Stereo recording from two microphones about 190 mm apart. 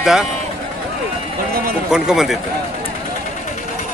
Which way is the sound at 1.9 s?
5° right (ahead or behind).